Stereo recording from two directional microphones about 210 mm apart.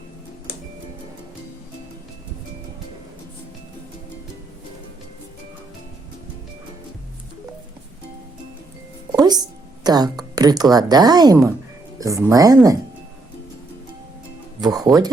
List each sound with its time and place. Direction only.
9.1 s speech: 20° right (ahead or behind)
14.6 s speech: 15° right (ahead or behind)